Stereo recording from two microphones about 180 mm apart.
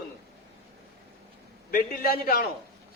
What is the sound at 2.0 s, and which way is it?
Speech, 55° left (ahead or behind).